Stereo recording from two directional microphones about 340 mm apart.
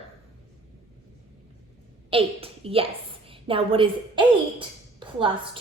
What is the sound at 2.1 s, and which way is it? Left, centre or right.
A child's voice, centre.